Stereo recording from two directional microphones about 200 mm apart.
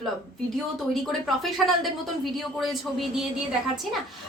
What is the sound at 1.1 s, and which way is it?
Speech, centre (ahead or behind).